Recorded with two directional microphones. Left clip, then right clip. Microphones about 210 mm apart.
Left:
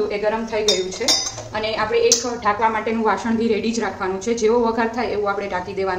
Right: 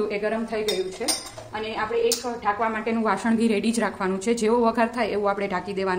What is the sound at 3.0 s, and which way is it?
A woman's voice, 50° right (ahead or behind).